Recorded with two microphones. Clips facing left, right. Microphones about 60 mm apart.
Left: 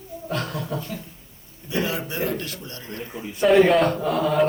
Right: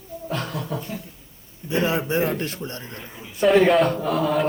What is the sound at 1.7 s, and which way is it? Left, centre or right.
A man's voice, right.